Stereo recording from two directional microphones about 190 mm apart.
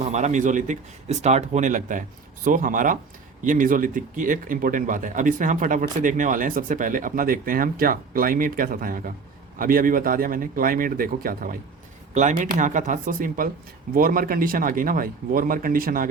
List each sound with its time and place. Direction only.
0.0 s speech: 40° right (ahead or behind)